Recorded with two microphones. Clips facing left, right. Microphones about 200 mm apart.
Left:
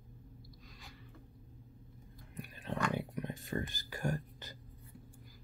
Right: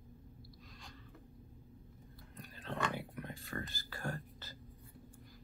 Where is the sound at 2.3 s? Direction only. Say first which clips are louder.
Left 3 dB; 15° left (ahead or behind).